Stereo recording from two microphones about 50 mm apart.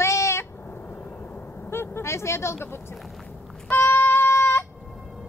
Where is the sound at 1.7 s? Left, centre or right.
Left.